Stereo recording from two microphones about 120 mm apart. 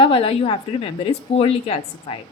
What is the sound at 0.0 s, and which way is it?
A woman's voice, 50° left (ahead or behind).